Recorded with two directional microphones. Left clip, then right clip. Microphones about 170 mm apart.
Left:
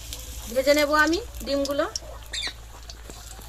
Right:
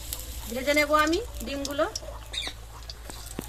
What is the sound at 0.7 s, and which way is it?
Speech, 35° left (ahead or behind).